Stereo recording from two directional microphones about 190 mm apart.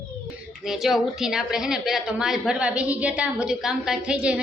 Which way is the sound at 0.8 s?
Centre (ahead or behind).